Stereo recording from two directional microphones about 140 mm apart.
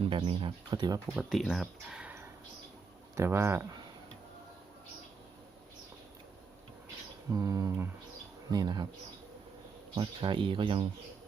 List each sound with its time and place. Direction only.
0.0 s speech: 40° right (ahead or behind)
1.1 s speech: 5° right (ahead or behind); by 3.7 s 20° right (ahead or behind)
7.3 s speech: 25° right (ahead or behind)
9.9 s speech: 35° right (ahead or behind)